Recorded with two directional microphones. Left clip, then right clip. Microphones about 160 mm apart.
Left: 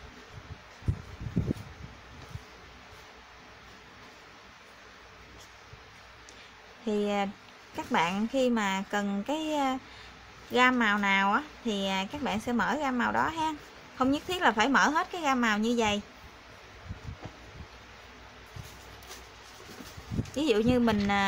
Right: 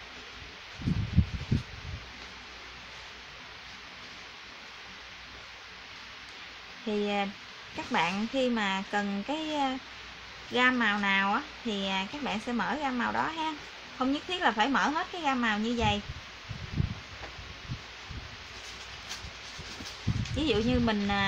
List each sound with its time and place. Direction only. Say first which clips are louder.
6.9 s speech: left 1 dB; 20° left (ahead or behind)
20.3 s speech: left 3 dB; 25° left (ahead or behind)